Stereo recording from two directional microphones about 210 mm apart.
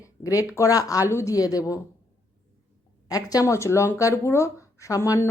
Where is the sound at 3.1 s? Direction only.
15° left (ahead or behind).